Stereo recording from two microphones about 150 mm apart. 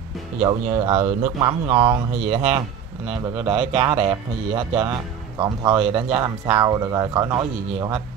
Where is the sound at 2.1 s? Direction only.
45° right (ahead or behind).